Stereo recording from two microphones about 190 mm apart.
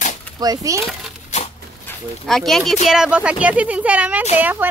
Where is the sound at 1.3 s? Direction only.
35° left (ahead or behind).